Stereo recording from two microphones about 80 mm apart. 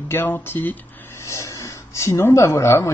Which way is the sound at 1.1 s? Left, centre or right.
Left.